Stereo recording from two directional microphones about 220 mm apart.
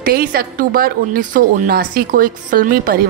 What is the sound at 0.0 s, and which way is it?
A woman's voice, 45° right (ahead or behind).